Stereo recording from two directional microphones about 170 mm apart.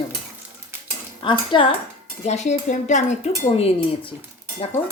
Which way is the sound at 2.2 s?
45° left (ahead or behind).